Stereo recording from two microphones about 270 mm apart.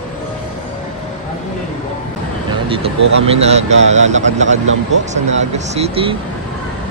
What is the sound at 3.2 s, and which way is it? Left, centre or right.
Speech, right.